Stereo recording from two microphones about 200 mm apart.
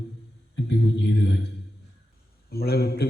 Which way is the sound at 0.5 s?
60° left (ahead or behind).